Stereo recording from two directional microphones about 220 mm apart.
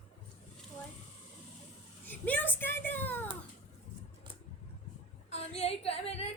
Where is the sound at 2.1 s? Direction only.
10° left (ahead or behind).